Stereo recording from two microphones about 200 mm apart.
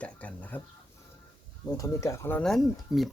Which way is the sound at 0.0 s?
5° left (ahead or behind).